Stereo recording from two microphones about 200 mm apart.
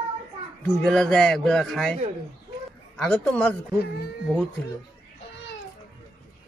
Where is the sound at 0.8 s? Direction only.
5° left (ahead or behind).